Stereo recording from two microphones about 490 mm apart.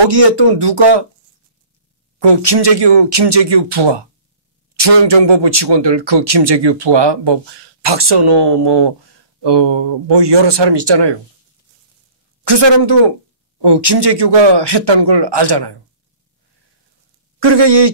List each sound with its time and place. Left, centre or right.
0.0 s speech: right
2.1 s a man's voice: right
12.4 s a man's voice: right
17.4 s a man's voice: right